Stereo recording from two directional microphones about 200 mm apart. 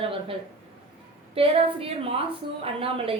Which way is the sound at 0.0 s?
25° right (ahead or behind).